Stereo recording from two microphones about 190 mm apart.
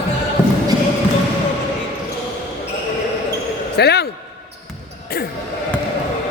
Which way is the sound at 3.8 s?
60° left (ahead or behind).